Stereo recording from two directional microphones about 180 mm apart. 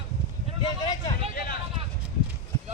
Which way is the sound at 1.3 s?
55° left (ahead or behind).